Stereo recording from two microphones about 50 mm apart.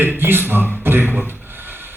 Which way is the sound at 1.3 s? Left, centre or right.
Right.